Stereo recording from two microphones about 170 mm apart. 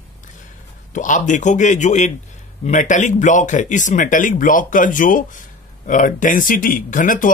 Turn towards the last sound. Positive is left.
turn(degrees=50)  # may be behind; listen again after turning